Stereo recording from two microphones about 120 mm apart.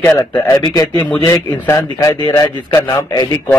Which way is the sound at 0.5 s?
30° left (ahead or behind).